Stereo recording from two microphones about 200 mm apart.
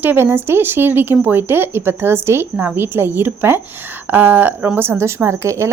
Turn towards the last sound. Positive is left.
turn(degrees=-15)  # may be behind; listen again after turning